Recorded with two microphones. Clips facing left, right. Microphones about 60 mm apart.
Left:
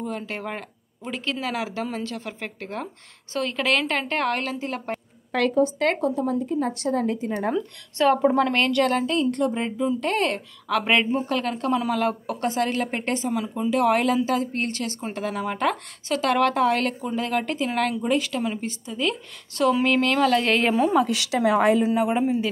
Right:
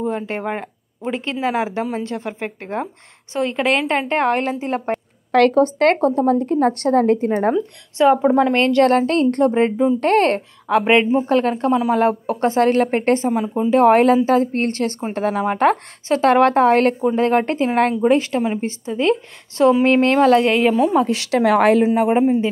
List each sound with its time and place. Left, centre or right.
0.0 s speech: right
4.9 s a woman's voice: right
7.5 s speech: centre
8.8 s a woman's voice: right
10.7 s speech: right
13.3 s speech: right
20.4 s speech: centre
20.9 s speech: right
21.5 s a woman's voice: right
21.9 s speech: right